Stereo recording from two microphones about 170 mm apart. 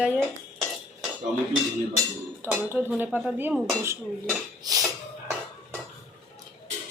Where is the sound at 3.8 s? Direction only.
20° right (ahead or behind).